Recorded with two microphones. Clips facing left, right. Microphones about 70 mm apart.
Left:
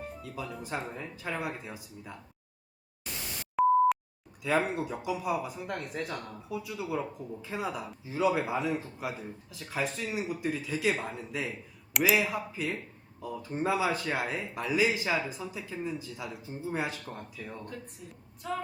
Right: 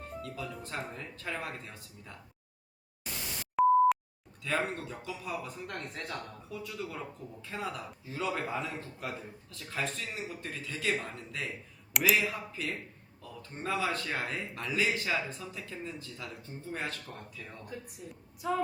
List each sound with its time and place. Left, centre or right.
0.0 s speech: centre
3.5 s beep: centre
4.4 s speech: centre
17.7 s a woman's voice: centre